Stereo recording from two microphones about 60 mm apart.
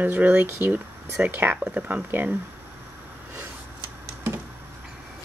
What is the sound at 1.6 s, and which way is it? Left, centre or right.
Speech, right.